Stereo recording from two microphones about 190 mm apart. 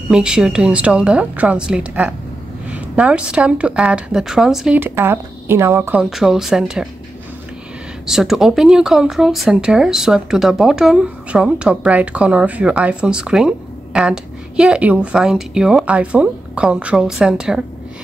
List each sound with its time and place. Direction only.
0.1 s speech: 5° right (ahead or behind)
8.1 s speech: centre (ahead or behind)